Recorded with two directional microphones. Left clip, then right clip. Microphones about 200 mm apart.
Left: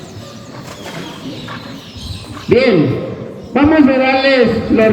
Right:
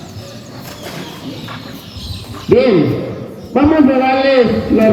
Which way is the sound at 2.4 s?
55° left (ahead or behind).